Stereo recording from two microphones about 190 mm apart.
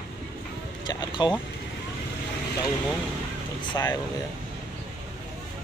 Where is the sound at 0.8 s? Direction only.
20° left (ahead or behind).